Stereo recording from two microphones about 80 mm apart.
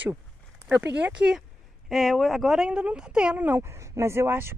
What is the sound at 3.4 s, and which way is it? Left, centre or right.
Speech, right.